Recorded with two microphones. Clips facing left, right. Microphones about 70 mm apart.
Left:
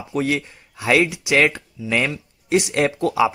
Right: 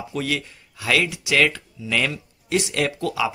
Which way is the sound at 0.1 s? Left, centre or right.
Left.